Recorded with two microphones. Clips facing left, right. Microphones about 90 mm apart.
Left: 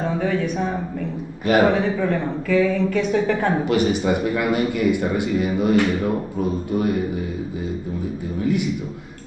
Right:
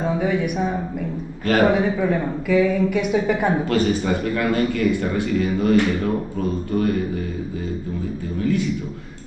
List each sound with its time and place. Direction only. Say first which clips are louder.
0.0 s speech: right 1 dB; 10° right (ahead or behind)
1.4 s a man's voice: left 1 dB; 15° left (ahead or behind)
1.8 s speech: right 1 dB; 10° right (ahead or behind)
3.6 s speech: left 1 dB; 20° left (ahead or behind)
8.4 s speech: even; 20° left (ahead or behind)